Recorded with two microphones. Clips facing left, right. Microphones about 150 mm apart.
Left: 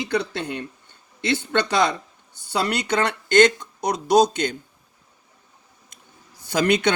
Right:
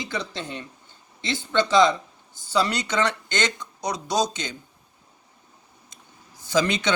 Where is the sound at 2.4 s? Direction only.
60° left (ahead or behind).